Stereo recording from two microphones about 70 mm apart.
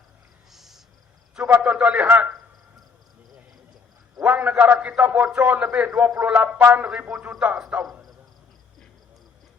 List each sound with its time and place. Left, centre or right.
0.5 s a sound: centre
1.4 s a man's voice: right
4.2 s a man's voice: right